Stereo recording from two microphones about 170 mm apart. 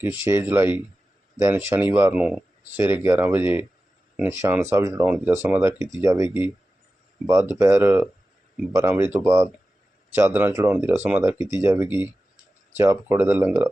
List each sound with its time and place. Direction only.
0.0 s speech: 10° right (ahead or behind)
7.6 s speech: 15° right (ahead or behind)